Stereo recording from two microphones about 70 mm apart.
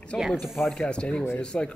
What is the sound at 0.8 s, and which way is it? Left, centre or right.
Speech, centre.